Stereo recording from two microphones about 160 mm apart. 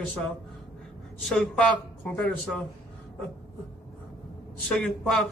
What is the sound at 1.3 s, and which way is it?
A man's voice, 5° left (ahead or behind).